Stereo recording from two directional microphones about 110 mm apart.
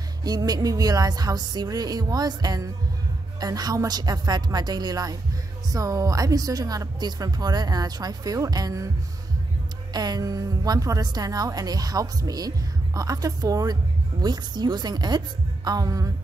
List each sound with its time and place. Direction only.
0.2 s a woman's voice: 35° right (ahead or behind)
9.9 s a woman's voice: 35° right (ahead or behind)